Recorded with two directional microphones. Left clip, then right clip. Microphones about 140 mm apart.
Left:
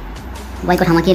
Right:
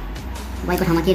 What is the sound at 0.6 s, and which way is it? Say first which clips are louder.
Speech: left 6 dB; 30° left (ahead or behind).